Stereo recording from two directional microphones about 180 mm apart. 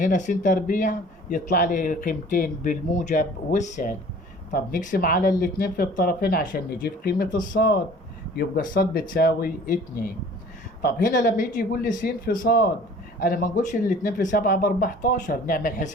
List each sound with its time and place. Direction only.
0.0 s speech: 45° left (ahead or behind)